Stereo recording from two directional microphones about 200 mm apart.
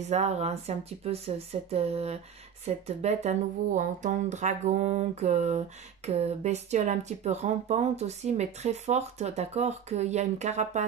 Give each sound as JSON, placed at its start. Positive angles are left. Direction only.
{"t": 0.1, "sound": "speech", "side_deg": -35}